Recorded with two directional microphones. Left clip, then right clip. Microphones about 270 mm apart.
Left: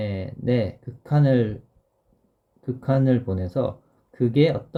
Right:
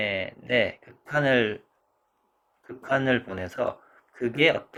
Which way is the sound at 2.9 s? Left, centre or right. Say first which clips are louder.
Even; centre.